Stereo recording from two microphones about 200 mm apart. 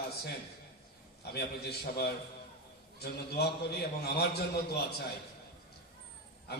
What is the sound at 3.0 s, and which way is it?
A man's voice, 50° left (ahead or behind).